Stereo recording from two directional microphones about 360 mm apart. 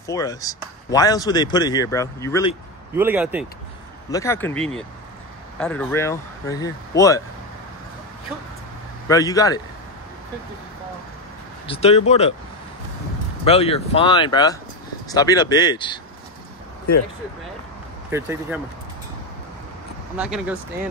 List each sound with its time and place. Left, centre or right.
0.0 s a man's voice: centre
2.9 s speech: centre
4.1 s a man's voice: centre
9.0 s a man's voice: centre
11.6 s a man's voice: centre
13.4 s a man's voice: centre
18.1 s speech: centre
20.2 s speech: centre